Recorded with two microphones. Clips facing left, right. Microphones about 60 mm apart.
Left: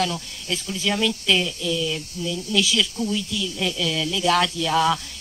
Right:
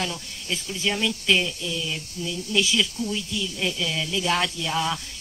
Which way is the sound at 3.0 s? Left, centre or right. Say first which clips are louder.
Left 3 dB; centre.